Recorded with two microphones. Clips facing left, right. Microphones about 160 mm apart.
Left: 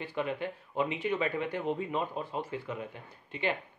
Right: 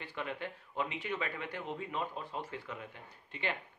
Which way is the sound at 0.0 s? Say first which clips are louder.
Left 7 dB; 15° left (ahead or behind).